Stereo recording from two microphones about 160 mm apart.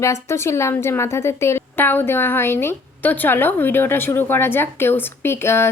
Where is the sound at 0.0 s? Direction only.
15° left (ahead or behind).